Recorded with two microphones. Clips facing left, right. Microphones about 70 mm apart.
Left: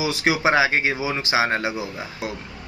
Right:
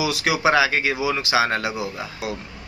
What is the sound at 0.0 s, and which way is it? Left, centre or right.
Speech, left.